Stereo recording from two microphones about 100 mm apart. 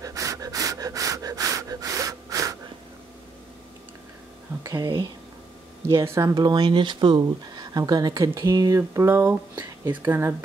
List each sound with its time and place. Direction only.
0.0 s breathing: 35° right (ahead or behind)
4.6 s speech: 40° right (ahead or behind)
5.9 s speech: 30° right (ahead or behind)
6.3 s speech: 50° right (ahead or behind); by 10.3 s 25° right (ahead or behind)